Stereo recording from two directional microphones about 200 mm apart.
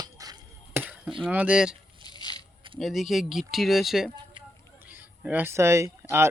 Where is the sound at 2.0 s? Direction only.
20° left (ahead or behind).